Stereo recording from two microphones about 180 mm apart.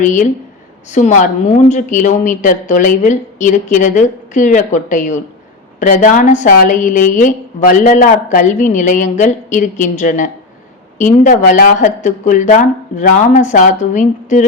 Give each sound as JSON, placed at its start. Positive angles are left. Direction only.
{"t": 0.0, "sound": "a woman's voice", "side_deg": 45}